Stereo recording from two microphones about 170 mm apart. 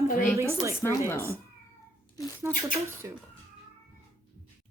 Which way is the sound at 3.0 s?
15° right (ahead or behind).